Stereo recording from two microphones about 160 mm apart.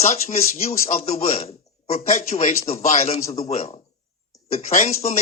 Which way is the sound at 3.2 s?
20° left (ahead or behind).